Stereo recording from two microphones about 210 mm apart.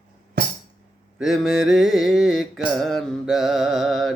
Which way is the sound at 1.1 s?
Centre (ahead or behind).